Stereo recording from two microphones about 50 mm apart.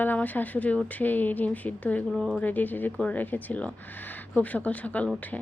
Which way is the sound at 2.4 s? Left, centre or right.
Left.